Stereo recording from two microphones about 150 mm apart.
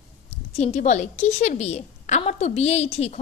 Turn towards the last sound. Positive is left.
turn(degrees=40)  # may be behind; listen again after turning